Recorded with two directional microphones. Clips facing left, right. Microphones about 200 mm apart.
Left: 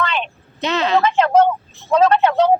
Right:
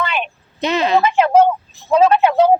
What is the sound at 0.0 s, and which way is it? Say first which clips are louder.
Speech: even; 10° right (ahead or behind).